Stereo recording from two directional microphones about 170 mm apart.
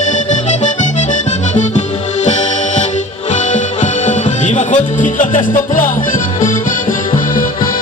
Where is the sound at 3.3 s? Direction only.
45° left (ahead or behind).